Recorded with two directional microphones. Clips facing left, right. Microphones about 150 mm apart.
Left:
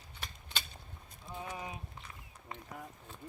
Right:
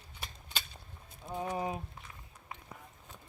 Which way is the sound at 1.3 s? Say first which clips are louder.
Right 7 dB; 45° right (ahead or behind).